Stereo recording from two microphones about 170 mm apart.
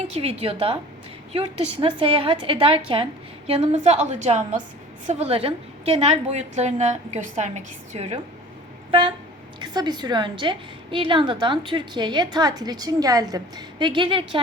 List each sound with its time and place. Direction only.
0.1 s a woman's voice: 35° right (ahead or behind)
8.9 s a woman's voice: 30° right (ahead or behind)